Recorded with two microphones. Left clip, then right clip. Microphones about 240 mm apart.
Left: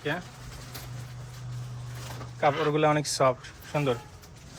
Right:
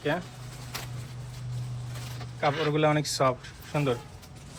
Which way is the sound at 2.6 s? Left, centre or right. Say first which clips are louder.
Left 1 dB; centre.